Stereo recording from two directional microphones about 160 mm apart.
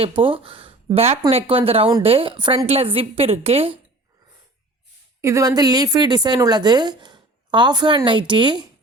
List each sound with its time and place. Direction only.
0.0 s a woman's voice: 35° right (ahead or behind)
5.2 s a woman's voice: 20° right (ahead or behind)